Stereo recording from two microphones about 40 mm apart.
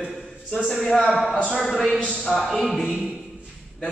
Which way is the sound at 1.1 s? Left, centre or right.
Centre.